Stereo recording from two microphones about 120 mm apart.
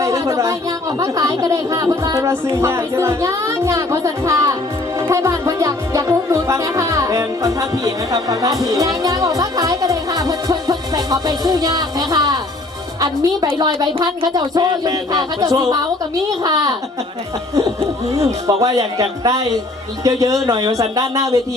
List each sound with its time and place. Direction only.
0.0 s a sound: 25° right (ahead or behind)
0.9 s music: 30° right (ahead or behind)
13.6 s speech: 35° right (ahead or behind)
17.5 s music: 25° right (ahead or behind)